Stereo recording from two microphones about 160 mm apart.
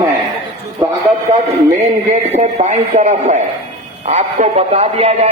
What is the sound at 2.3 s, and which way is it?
A man's voice, 45° right (ahead or behind).